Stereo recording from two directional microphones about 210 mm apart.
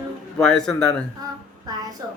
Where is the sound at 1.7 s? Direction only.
20° right (ahead or behind).